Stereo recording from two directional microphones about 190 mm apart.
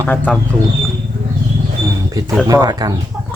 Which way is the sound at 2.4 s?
20° right (ahead or behind).